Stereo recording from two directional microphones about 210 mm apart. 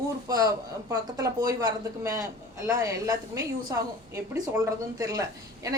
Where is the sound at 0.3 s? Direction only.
15° right (ahead or behind).